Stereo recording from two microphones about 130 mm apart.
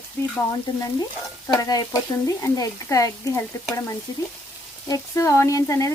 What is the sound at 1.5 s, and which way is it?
Speech, 30° left (ahead or behind).